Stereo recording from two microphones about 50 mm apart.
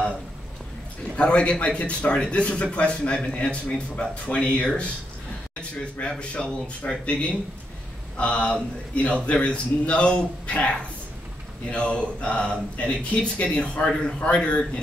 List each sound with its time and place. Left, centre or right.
1.1 s a man's voice: left